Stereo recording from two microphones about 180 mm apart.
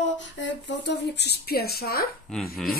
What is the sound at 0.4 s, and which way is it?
Speech, 80° left.